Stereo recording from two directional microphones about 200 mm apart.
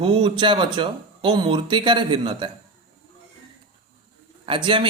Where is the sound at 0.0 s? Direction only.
25° right (ahead or behind).